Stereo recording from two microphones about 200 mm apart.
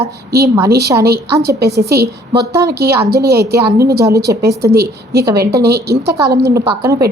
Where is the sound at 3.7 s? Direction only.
15° right (ahead or behind).